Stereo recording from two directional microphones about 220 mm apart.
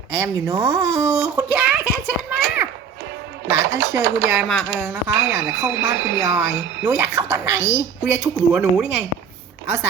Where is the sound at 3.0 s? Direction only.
50° right (ahead or behind).